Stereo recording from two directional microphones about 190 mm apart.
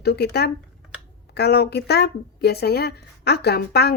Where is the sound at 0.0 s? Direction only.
55° left (ahead or behind).